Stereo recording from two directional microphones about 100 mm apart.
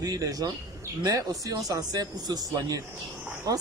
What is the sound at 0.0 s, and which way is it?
Speech, 40° right (ahead or behind).